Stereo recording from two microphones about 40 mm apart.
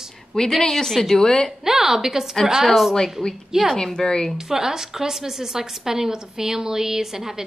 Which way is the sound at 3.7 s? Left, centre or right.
Centre.